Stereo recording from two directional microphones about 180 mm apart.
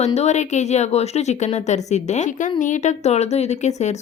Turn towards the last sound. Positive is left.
turn(degrees=40)  # may be behind; listen again after turning